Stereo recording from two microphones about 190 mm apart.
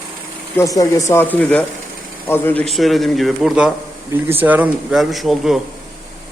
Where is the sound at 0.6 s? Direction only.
20° left (ahead or behind); by 5.6 s centre (ahead or behind).